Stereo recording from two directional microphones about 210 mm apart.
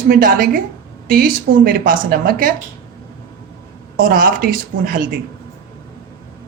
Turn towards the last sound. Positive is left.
turn(degrees=-40)  # may be behind; listen again after turning